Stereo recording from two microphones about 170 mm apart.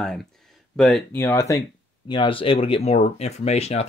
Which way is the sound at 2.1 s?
30° left (ahead or behind).